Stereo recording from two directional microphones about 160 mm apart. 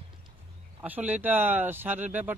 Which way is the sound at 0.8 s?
10° right (ahead or behind).